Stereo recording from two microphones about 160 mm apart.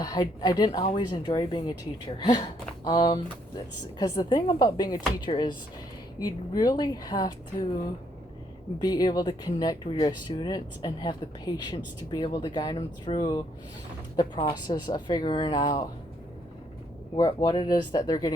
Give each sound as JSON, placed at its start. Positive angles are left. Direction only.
{"t": 0.0, "sound": "speech", "side_deg": 25}
{"t": 8.8, "sound": "speech", "side_deg": 25}
{"t": 17.2, "sound": "speech", "side_deg": 25}